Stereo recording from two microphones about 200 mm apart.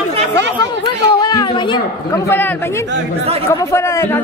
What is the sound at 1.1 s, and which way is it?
Speech, 20° left (ahead or behind).